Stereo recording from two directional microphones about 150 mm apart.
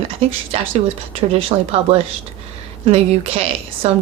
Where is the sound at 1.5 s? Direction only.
40° right (ahead or behind).